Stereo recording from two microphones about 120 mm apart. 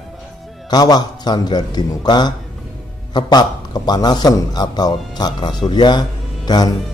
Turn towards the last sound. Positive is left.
turn(degrees=35)  # may be behind; listen again after turning